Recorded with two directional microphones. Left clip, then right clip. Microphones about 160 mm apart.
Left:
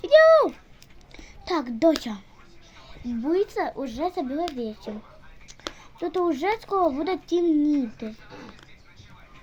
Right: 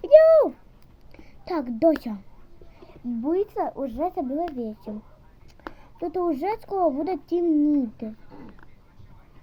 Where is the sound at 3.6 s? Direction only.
15° left (ahead or behind).